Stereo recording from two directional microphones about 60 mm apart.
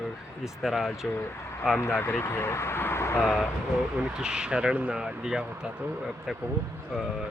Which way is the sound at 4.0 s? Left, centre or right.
Centre.